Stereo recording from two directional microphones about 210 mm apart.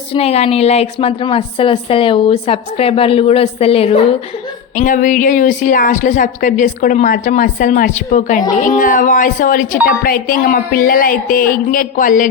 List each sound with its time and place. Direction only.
0.1 s a woman's voice: 30° left (ahead or behind)
4.7 s a woman's voice: 40° left (ahead or behind)